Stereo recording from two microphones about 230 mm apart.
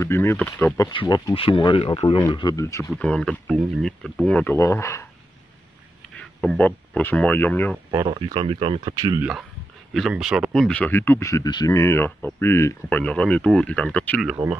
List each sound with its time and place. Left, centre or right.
0.0 s speech: centre
6.1 s speech: centre
7.9 s speech: centre
9.9 s speech: centre
14.3 s speech: centre